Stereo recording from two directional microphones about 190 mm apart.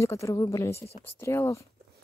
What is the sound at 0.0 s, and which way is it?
Speech, 15° left (ahead or behind).